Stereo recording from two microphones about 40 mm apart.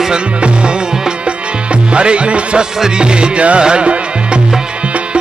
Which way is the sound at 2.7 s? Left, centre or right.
Centre.